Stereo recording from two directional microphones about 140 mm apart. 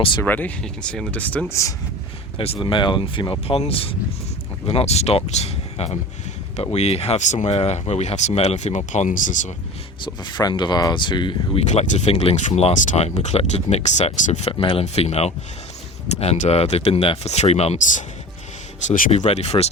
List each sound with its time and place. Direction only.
0.2 s speech: 10° left (ahead or behind)
2.4 s speech: 40° left (ahead or behind); by 9.5 s 65° left (ahead or behind)
10.0 s speech: 30° left (ahead or behind)
11.6 s speech: 55° left (ahead or behind)
12.5 s speech: 55° left (ahead or behind)
18.9 s speech: 60° left (ahead or behind)